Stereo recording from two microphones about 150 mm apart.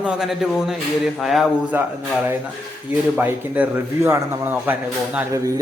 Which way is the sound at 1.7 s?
15° right (ahead or behind).